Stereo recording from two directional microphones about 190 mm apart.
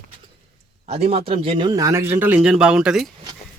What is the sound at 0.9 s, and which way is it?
A man's voice, 30° right (ahead or behind).